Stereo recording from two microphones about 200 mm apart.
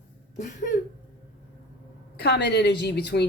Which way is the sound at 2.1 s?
55° left (ahead or behind).